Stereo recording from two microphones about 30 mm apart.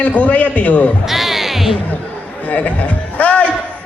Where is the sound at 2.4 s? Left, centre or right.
Left.